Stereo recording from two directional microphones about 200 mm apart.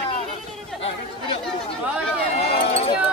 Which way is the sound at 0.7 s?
Centre (ahead or behind).